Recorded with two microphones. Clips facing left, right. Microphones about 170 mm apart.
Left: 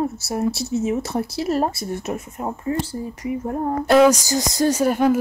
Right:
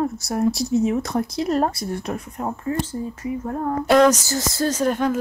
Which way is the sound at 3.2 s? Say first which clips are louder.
Left 3 dB; 20° left (ahead or behind).